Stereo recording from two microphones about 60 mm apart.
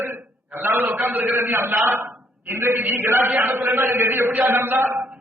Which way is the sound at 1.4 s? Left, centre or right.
Right.